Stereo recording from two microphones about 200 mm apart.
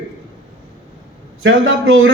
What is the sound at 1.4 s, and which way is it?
Speech, 70° right (ahead or behind).